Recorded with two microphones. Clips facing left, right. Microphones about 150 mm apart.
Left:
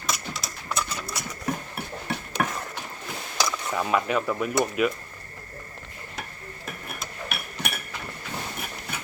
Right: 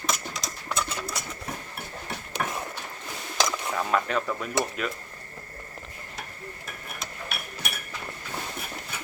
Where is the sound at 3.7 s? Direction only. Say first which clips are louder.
Left 3 dB; 5° left (ahead or behind).